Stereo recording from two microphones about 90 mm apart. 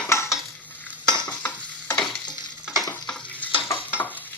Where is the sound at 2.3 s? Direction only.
45° left (ahead or behind).